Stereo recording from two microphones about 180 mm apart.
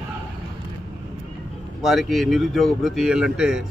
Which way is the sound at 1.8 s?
Centre (ahead or behind).